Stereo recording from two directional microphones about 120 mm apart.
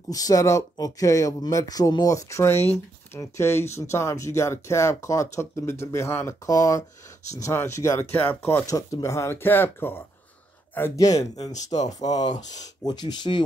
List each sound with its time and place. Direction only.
0.1 s speech: 30° left (ahead or behind)
8.6 s speech: 30° left (ahead or behind)
11.9 s speech: 35° left (ahead or behind)